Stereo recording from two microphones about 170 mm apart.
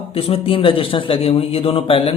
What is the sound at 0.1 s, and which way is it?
A man's voice, 35° left (ahead or behind).